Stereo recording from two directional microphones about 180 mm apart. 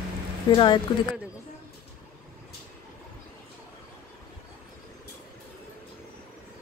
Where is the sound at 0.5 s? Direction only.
25° left (ahead or behind).